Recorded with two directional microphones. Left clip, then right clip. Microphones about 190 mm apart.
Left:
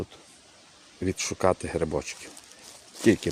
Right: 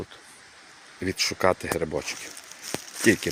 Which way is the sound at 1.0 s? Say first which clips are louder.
Right 2 dB; 20° left (ahead or behind).